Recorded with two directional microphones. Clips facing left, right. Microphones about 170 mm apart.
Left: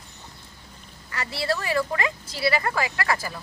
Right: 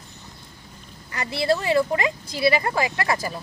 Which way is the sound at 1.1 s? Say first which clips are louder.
Right 5 dB; 20° right (ahead or behind).